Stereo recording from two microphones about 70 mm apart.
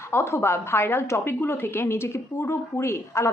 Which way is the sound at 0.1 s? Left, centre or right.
Left.